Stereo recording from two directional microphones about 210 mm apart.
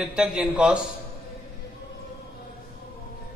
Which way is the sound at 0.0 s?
5° right (ahead or behind).